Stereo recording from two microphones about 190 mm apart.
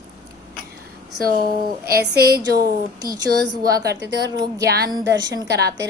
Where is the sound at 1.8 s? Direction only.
55° right (ahead or behind).